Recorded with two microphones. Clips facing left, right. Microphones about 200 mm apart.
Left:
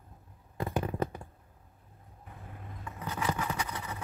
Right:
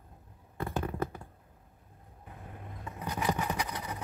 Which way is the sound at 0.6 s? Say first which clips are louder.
Left 2 dB; 15° left (ahead or behind).